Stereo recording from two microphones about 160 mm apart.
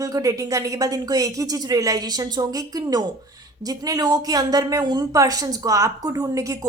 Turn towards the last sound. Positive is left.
turn(degrees=-20)  # may be behind; listen again after turning